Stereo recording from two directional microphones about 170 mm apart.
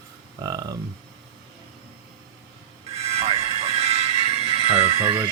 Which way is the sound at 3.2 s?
35° right (ahead or behind).